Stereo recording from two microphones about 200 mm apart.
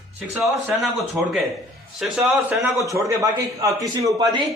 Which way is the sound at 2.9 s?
15° right (ahead or behind).